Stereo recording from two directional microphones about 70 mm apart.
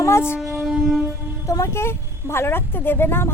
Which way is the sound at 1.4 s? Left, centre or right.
Left.